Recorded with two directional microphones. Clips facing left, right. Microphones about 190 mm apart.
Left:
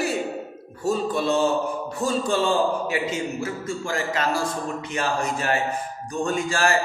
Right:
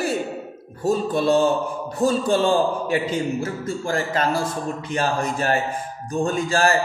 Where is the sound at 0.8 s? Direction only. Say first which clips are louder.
Right 3 dB; 30° right (ahead or behind).